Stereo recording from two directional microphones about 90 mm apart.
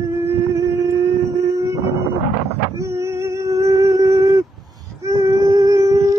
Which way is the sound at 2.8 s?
35° right (ahead or behind).